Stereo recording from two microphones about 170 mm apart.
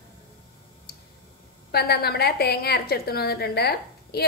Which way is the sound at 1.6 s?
70° left (ahead or behind).